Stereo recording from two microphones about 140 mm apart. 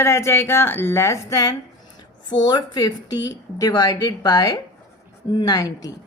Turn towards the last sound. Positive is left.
turn(degrees=25)  # may be behind; listen again after turning